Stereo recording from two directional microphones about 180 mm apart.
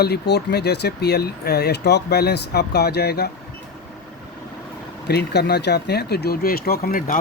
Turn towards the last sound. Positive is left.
turn(degrees=55)  # may be behind; listen again after turning